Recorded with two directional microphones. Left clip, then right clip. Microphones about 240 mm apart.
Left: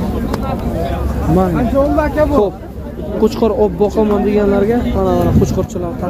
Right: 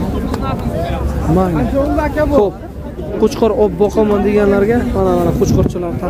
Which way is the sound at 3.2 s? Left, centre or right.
Centre.